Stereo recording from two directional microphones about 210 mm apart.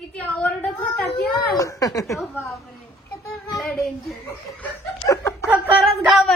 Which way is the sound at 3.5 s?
Centre (ahead or behind).